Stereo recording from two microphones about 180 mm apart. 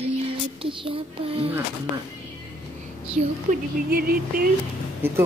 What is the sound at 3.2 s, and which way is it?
Speech, 45° right (ahead or behind).